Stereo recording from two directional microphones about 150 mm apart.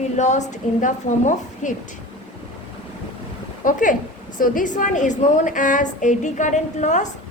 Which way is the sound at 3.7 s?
60° left (ahead or behind).